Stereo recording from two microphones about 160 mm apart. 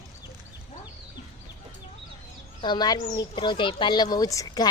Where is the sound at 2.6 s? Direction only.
25° left (ahead or behind).